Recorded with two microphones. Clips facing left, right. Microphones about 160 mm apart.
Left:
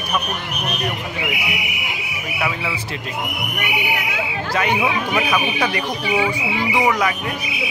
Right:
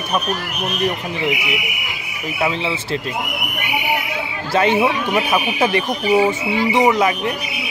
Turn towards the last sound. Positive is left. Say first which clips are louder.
# right 4 dB
turn(degrees=-25)  # may be behind; listen again after turning